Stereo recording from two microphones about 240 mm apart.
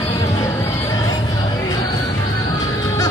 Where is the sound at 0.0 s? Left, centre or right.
Centre.